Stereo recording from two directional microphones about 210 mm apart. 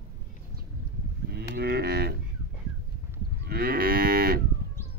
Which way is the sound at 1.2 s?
50° right (ahead or behind).